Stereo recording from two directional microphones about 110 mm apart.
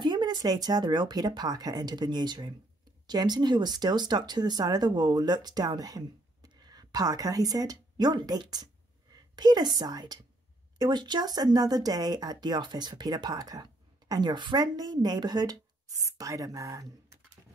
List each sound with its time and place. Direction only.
0.0 s a woman's voice: 45° right (ahead or behind)